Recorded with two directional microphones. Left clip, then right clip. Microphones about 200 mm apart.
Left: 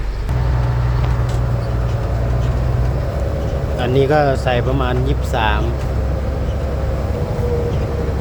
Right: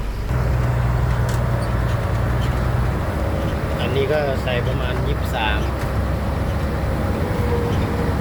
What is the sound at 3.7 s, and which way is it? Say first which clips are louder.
Speech: left 6 dB; 30° left (ahead or behind).